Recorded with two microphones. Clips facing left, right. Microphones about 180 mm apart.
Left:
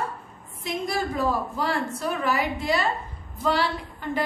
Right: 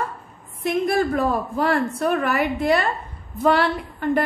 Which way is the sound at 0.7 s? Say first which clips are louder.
Right 8 dB; 60° right (ahead or behind).